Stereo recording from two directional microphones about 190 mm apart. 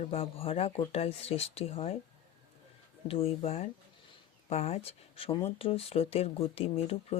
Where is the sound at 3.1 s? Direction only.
30° left (ahead or behind).